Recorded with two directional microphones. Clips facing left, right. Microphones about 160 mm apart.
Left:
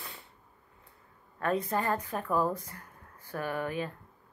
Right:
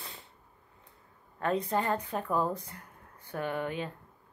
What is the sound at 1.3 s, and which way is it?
Speech, 25° right (ahead or behind).